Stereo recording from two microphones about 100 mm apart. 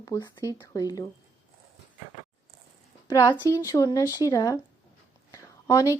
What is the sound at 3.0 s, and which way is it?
A woman's voice, 30° left (ahead or behind).